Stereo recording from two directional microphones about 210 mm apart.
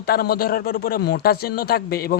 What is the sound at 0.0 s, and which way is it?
Speech, 50° left (ahead or behind).